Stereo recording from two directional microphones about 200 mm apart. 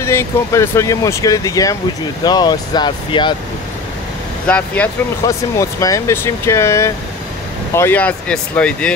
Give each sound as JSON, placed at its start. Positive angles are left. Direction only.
{"t": 0.0, "sound": "speech", "side_deg": 15}
{"t": 4.5, "sound": "speech", "side_deg": 5}
{"t": 5.2, "sound": "speech", "side_deg": 15}